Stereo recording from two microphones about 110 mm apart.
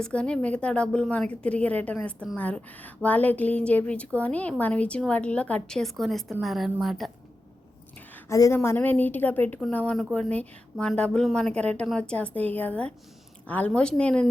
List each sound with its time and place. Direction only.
0.0 s a woman's voice: 10° left (ahead or behind)
8.3 s speech: 30° left (ahead or behind); by 14.3 s 10° left (ahead or behind)